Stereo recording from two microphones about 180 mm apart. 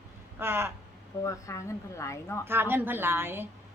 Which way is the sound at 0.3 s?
15° right (ahead or behind).